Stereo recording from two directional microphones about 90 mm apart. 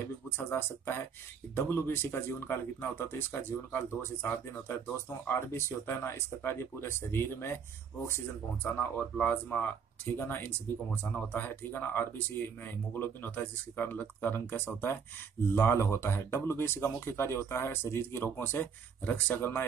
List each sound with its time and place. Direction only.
0.4 s speech: 25° left (ahead or behind)
9.2 s speech: 15° left (ahead or behind)